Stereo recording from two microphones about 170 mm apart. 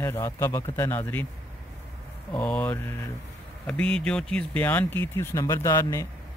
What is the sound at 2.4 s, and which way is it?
Speech, 5° left (ahead or behind).